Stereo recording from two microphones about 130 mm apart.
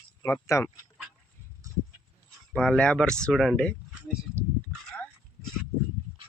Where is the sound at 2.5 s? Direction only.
5° left (ahead or behind).